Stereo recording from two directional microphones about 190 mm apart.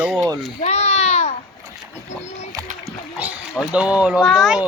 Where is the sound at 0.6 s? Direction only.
35° left (ahead or behind).